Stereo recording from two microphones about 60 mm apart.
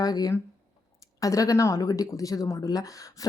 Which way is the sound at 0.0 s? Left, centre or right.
Left.